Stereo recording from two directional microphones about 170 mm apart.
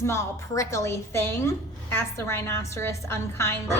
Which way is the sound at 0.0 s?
15° left (ahead or behind).